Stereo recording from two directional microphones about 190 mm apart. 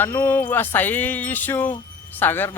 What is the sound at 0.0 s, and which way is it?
Speech, 10° left (ahead or behind).